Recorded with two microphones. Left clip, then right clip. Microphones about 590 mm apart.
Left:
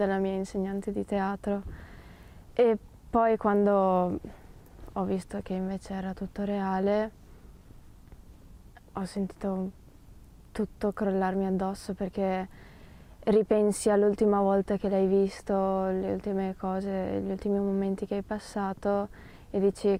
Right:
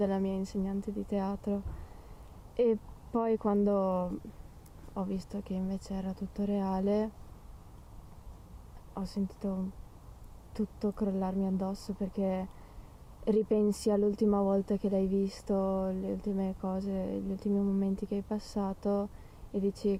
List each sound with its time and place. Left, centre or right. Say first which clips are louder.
0.0 s speech: left 4 dB; left
9.0 s speech: left 4 dB; left